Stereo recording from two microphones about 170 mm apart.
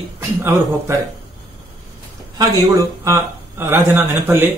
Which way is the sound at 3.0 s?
15° right (ahead or behind).